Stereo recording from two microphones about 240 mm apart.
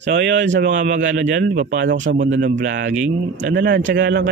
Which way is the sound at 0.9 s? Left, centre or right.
Right.